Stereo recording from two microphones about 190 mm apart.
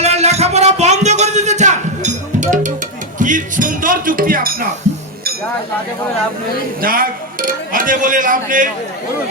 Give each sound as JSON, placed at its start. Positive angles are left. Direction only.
{"t": 0.0, "sound": "music", "side_deg": -35}
{"t": 6.8, "sound": "speech", "side_deg": -50}